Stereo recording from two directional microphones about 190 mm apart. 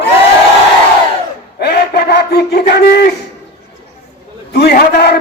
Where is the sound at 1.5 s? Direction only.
55° left (ahead or behind).